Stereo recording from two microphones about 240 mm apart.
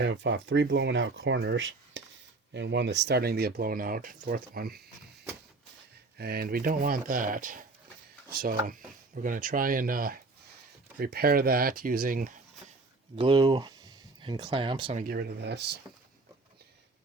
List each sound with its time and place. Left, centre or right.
0.0 s speech: right
6.1 s speech: right
13.1 s speech: centre
15.0 s speech: right